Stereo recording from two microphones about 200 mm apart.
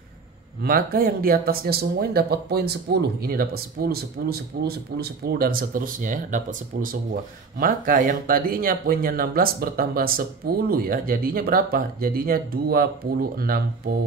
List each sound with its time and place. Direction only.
0.6 s speech: 50° right (ahead or behind)